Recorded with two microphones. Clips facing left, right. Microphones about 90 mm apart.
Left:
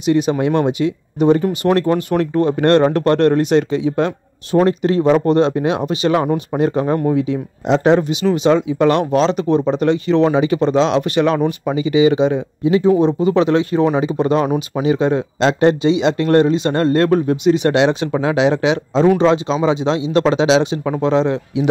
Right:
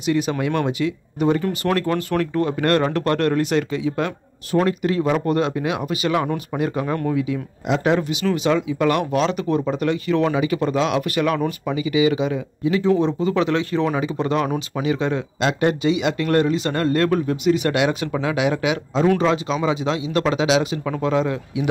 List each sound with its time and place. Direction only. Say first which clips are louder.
0.0 s speech: left 6 dB; 20° left (ahead or behind)